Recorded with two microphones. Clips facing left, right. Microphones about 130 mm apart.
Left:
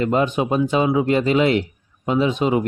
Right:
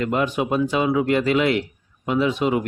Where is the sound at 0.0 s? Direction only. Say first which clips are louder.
Left 3 dB; 25° left (ahead or behind).